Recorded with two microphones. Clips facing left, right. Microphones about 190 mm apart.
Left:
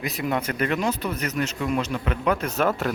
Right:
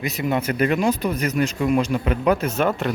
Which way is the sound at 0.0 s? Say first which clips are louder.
Right 3 dB; centre (ahead or behind).